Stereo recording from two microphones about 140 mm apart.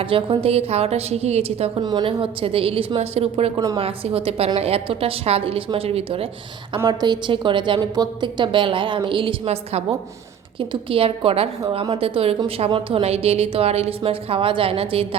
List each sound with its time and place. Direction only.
0.0 s a woman's voice: 40° right (ahead or behind)
1.8 s a woman's voice: 30° right (ahead or behind)
6.8 s a woman's voice: 35° right (ahead or behind)